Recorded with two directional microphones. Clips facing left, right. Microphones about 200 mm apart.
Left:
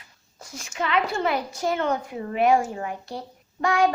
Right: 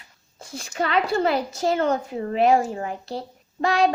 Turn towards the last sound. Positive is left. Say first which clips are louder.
# right 1 dB
turn(degrees=-30)  # may be behind; listen again after turning